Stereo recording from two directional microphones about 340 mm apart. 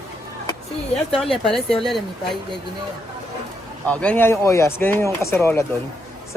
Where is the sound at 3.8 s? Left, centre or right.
Centre.